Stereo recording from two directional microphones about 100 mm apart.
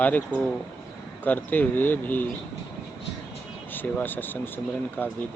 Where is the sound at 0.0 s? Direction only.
15° left (ahead or behind).